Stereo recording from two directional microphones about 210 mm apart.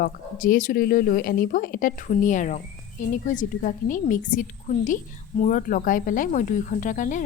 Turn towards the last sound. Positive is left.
turn(degrees=40)  # may be behind; listen again after turning